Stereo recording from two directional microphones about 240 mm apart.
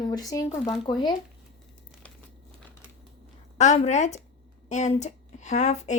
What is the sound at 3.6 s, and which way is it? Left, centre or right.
Speech, left.